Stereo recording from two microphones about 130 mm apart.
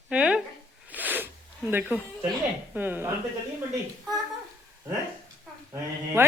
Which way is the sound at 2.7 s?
15° right (ahead or behind).